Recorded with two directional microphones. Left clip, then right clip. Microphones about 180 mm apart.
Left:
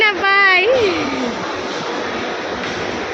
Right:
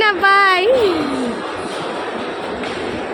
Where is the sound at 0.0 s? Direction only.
20° right (ahead or behind).